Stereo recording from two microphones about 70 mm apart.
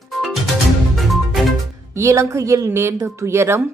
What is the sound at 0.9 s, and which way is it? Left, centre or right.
Music, centre.